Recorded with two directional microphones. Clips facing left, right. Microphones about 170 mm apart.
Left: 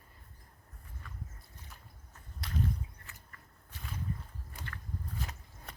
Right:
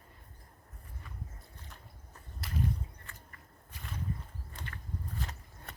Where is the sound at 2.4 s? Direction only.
5° right (ahead or behind).